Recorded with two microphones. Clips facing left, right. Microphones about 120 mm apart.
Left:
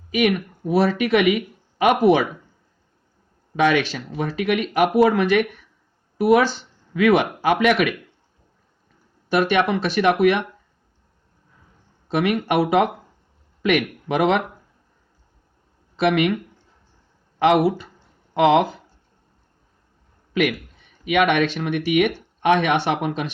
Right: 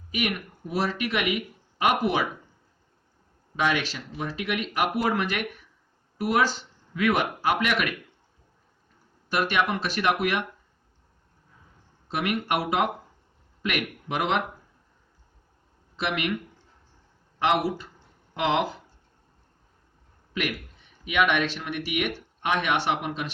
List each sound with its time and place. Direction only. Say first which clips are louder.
0.1 s speech: left 9 dB; 90° left
0.8 s speech: left 9 dB; 70° left (ahead or behind); by 2.2 s 85° left
3.6 s speech: left 7 dB; 70° left (ahead or behind); by 7.9 s 90° left
9.3 s speech: left 6 dB; 90° left
12.0 s speech: left 7 dB; 75° left (ahead or behind)
16.0 s speech: left 10 dB; 70° left (ahead or behind)
17.4 s speech: left 7 dB; 65° left (ahead or behind)
20.3 s a man's voice: left 9 dB; 85° left
21.0 s speech: left 6 dB; 60° left (ahead or behind); by 23.3 s 80° left